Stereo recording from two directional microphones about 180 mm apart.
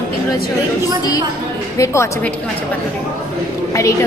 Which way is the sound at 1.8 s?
15° left (ahead or behind).